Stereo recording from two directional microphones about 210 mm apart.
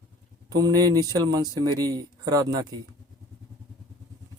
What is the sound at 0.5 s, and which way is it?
Speech, 15° right (ahead or behind).